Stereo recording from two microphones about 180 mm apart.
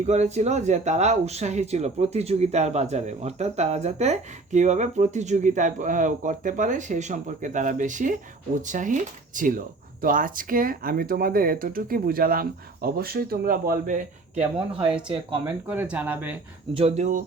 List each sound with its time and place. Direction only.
0.0 s speech: 40° right (ahead or behind)
15.4 s speech: 10° right (ahead or behind)
16.7 s speech: 40° right (ahead or behind)